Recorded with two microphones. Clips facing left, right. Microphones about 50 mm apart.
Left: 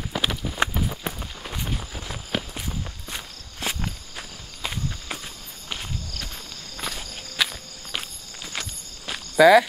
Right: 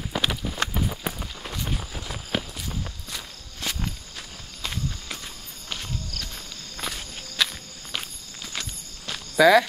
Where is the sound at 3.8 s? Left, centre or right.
Centre.